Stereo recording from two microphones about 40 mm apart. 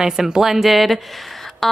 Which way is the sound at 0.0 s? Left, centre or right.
Centre.